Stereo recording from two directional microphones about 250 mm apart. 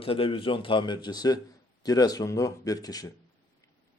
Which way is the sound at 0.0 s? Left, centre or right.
Left.